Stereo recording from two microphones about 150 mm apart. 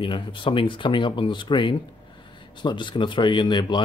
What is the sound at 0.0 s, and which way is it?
Speech, 35° left (ahead or behind).